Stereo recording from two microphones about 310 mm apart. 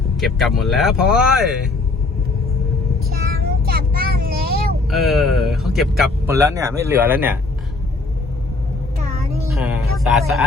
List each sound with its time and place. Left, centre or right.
0.2 s speech: centre
3.1 s child singing: right
4.9 s speech: centre
9.4 s music: centre